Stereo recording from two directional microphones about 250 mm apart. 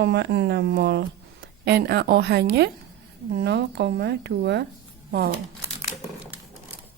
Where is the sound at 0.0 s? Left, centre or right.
Right.